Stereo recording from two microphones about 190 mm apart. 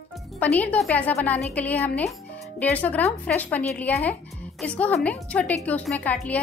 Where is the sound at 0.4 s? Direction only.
10° left (ahead or behind).